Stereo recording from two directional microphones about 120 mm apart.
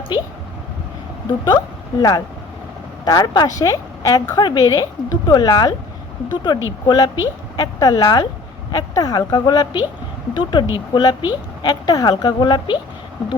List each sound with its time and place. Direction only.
1.5 s a woman's voice: 35° left (ahead or behind)